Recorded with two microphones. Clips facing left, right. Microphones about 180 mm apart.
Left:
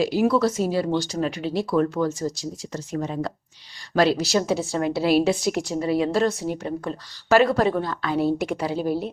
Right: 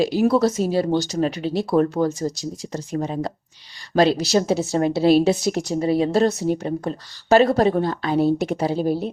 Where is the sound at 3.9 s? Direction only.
20° right (ahead or behind); by 6.9 s 40° right (ahead or behind).